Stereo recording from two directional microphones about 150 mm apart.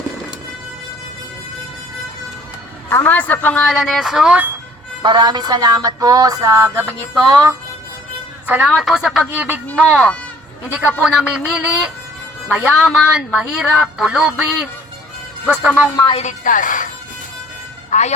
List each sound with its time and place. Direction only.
2.9 s a man's voice: 10° left (ahead or behind); by 4.5 s 10° right (ahead or behind)
5.0 s a sound: 30° right (ahead or behind)
8.4 s a man's voice: 5° right (ahead or behind)
16.1 s speech: 55° left (ahead or behind)
17.9 s a woman's voice: 50° left (ahead or behind)